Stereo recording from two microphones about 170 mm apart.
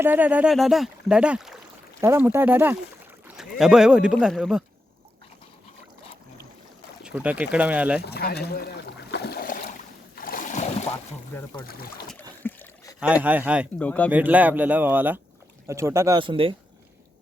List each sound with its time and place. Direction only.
0.0 s speech: 10° right (ahead or behind)
7.0 s speech: 5° right (ahead or behind)
8.0 s a sound: 70° left (ahead or behind); by 10.9 s 40° left (ahead or behind)
12.4 s a sound: 10° left (ahead or behind)
13.0 s speech: 10° right (ahead or behind)
13.7 s speech: 10° left (ahead or behind)
14.1 s speech: 10° right (ahead or behind)
16.2 s a man's voice: 30° right (ahead or behind)